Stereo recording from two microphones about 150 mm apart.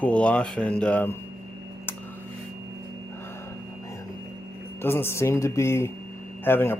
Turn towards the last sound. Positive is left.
turn(degrees=15)  # may be behind; listen again after turning